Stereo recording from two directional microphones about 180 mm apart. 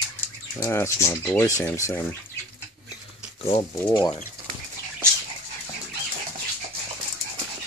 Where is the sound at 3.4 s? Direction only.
30° left (ahead or behind).